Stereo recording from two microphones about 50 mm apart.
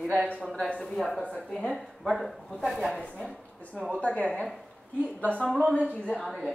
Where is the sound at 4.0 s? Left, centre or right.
Left.